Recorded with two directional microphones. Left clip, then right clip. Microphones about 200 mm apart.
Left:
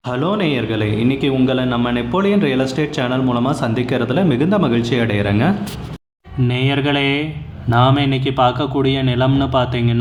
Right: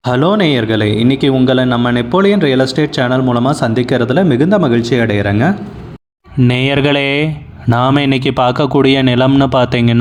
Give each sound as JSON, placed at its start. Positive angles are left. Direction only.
{"t": 0.1, "sound": "a man's voice", "side_deg": -30}
{"t": 6.4, "sound": "a man's voice", "side_deg": -45}